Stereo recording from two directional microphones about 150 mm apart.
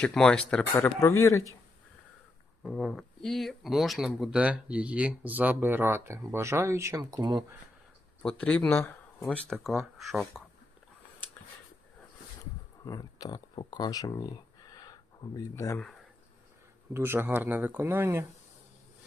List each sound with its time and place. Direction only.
0.0 s speech: 5° left (ahead or behind)
2.6 s speech: centre (ahead or behind); by 7.4 s 25° right (ahead or behind)
8.2 s speech: 5° left (ahead or behind)
12.8 s speech: 25° left (ahead or behind)
16.9 s speech: 15° right (ahead or behind)